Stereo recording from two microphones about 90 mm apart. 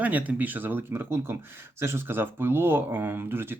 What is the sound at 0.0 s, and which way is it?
Speech, 15° right (ahead or behind).